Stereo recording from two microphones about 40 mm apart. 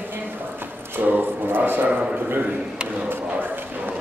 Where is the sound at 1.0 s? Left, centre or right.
Right.